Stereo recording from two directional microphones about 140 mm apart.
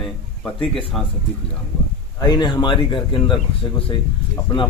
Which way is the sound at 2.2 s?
30° left (ahead or behind).